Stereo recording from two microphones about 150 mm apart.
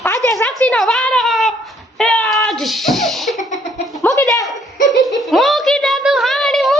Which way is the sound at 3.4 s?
55° left (ahead or behind).